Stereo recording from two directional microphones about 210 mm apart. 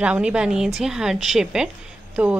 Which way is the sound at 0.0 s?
5° right (ahead or behind).